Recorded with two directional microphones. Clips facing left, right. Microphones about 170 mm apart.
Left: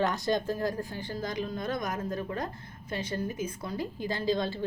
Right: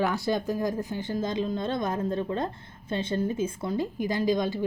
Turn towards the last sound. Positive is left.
turn(degrees=-15)  # may be behind; listen again after turning